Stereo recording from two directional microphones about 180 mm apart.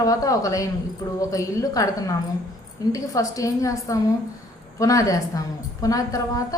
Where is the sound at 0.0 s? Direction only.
20° left (ahead or behind).